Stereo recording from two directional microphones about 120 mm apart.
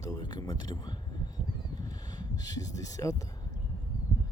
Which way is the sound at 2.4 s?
30° left (ahead or behind).